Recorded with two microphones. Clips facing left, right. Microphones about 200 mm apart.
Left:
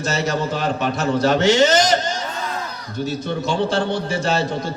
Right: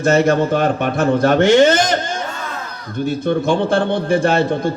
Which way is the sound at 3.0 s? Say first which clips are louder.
Right 6 dB; 55° right (ahead or behind).